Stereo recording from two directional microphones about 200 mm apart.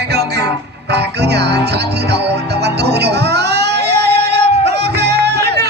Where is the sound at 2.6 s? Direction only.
55° right (ahead or behind).